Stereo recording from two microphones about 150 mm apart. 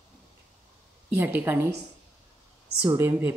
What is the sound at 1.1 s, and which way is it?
Speech, 15° right (ahead or behind).